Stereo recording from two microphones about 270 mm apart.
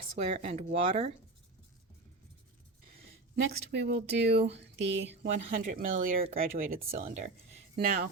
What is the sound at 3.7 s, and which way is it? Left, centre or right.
Speech, right.